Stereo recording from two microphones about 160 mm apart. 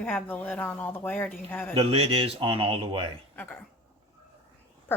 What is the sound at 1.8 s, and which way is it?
Speech, 35° right (ahead or behind).